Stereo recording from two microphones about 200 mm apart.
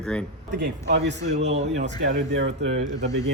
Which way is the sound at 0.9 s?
60° right (ahead or behind).